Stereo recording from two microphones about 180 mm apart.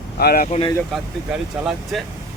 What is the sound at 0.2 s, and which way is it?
Speech, 55° left (ahead or behind).